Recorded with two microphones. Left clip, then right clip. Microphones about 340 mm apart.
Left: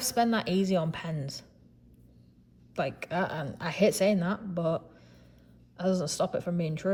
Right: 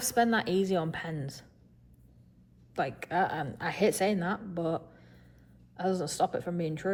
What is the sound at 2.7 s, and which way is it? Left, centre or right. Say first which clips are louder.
A woman's voice: right 1 dB; centre.